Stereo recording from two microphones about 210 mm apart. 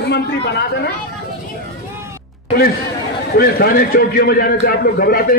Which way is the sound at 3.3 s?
45° left (ahead or behind).